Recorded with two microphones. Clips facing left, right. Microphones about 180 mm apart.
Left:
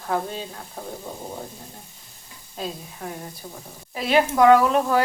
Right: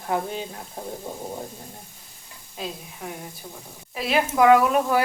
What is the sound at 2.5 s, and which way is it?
Speech, 5° right (ahead or behind).